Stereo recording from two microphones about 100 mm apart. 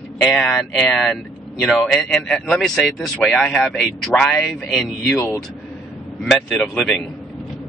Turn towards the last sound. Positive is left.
turn(degrees=5)  # may be behind; listen again after turning